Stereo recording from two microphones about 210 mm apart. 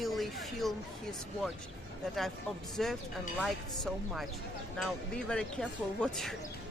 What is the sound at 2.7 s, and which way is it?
Speech, centre (ahead or behind).